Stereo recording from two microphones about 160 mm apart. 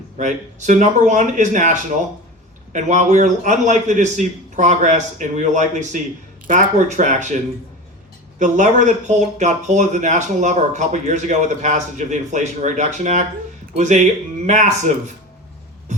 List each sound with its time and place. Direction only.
0.2 s speech: 50° right (ahead or behind)
8.4 s speech: 50° right (ahead or behind)